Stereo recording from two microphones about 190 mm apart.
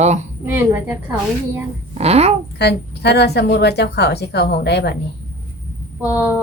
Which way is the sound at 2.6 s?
60° left (ahead or behind).